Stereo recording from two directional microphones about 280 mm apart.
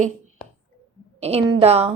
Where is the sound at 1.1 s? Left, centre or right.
Right.